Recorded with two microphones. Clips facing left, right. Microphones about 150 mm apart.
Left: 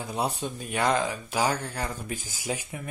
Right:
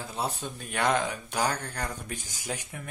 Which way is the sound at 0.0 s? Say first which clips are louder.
Left 4 dB; 15° left (ahead or behind).